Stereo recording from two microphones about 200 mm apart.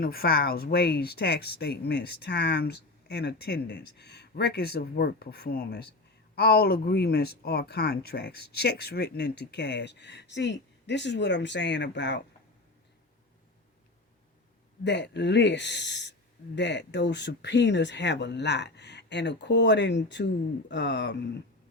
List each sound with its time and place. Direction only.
0.0 s speech: 50° left (ahead or behind)
14.8 s speech: 60° left (ahead or behind)